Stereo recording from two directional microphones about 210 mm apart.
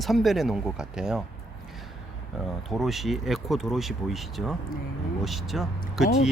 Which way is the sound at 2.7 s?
Centre (ahead or behind).